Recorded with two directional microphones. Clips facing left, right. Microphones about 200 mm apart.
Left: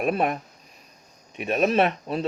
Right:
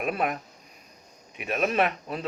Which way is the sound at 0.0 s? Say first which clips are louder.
Left 4 dB; 35° left (ahead or behind).